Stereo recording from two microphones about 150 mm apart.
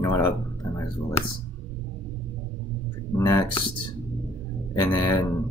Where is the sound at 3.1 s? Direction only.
15° left (ahead or behind).